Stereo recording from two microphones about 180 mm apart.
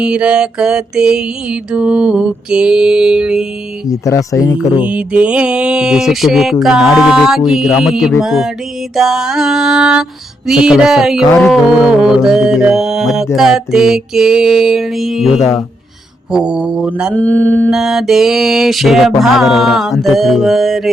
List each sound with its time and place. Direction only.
0.0 s music: 5° right (ahead or behind)
3.8 s speech: 20° left (ahead or behind)
4.8 s music: 5° right (ahead or behind)
16.3 s music: 5° right (ahead or behind)
17.2 s speech: 10° left (ahead or behind)
17.7 s music: centre (ahead or behind)